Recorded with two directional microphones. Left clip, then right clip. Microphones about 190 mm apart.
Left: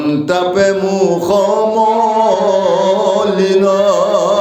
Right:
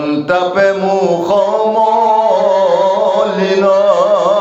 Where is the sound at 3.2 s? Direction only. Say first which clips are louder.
Even; 40° left (ahead or behind).